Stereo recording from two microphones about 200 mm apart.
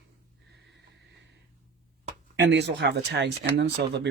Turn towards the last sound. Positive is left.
turn(degrees=-55)  # may be behind; listen again after turning